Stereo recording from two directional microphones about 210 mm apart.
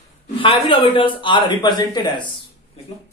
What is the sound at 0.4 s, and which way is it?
Speech, 25° left (ahead or behind).